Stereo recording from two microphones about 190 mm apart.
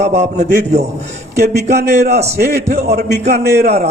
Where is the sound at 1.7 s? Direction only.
60° right (ahead or behind).